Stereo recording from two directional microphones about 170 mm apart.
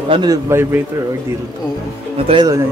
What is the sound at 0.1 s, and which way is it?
Speech, 25° right (ahead or behind).